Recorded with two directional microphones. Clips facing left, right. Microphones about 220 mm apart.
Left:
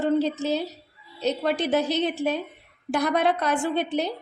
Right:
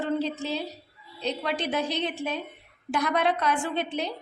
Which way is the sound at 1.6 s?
40° left (ahead or behind).